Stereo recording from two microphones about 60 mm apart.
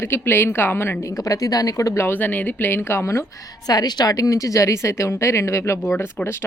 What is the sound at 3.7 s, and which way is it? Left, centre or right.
A woman's voice, left.